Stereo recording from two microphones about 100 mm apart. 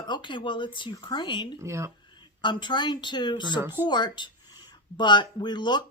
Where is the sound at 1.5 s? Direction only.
30° right (ahead or behind).